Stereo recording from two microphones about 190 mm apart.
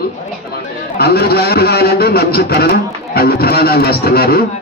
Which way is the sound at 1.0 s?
55° left (ahead or behind).